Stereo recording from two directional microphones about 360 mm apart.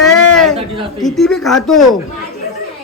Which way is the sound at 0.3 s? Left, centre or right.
Centre.